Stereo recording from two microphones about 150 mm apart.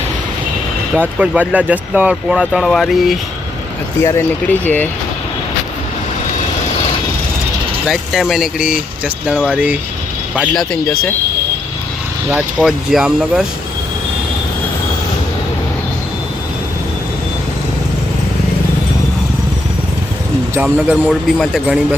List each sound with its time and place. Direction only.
0.9 s speech: 10° right (ahead or behind)
4.0 s speech: 20° left (ahead or behind)
7.9 s speech: centre (ahead or behind)
12.3 s speech: centre (ahead or behind)
20.6 s speech: 10° right (ahead or behind)